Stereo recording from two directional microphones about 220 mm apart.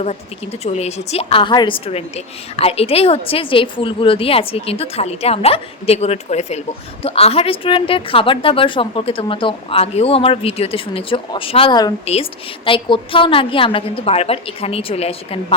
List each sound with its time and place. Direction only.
0.6 s a woman's voice: 30° left (ahead or behind)